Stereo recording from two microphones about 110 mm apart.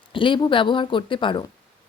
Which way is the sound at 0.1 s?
50° left (ahead or behind).